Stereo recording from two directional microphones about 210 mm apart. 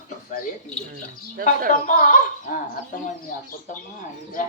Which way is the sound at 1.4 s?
40° right (ahead or behind).